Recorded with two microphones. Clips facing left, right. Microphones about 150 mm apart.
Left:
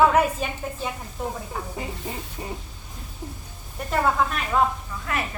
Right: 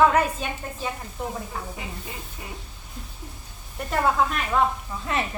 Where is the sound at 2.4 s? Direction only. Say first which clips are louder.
Left 8 dB; 30° left (ahead or behind).